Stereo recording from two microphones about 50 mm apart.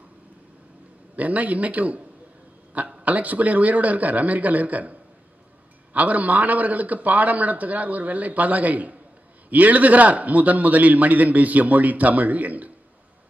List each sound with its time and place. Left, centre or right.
1.1 s a man's voice: right
5.9 s a man's voice: right